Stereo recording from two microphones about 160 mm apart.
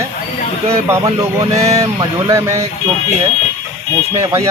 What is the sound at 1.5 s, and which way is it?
Speech, 20° right (ahead or behind).